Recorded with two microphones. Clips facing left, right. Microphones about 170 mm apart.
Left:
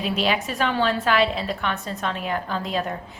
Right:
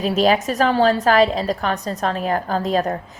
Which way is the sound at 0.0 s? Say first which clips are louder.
Right 7 dB; 40° right (ahead or behind).